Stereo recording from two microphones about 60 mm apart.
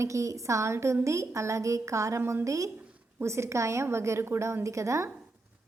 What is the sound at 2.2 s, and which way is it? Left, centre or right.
Speech, right.